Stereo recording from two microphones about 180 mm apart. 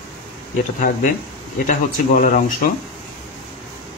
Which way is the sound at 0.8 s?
50° left (ahead or behind).